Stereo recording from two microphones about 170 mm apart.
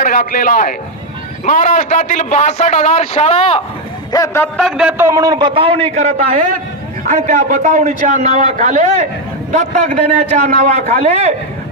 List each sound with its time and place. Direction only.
0.0 s a man's voice: 55° left (ahead or behind); by 3.6 s 35° left (ahead or behind)
4.1 s a man's voice: 15° left (ahead or behind)
4.6 s a man's voice: centre (ahead or behind); by 11.3 s 40° right (ahead or behind)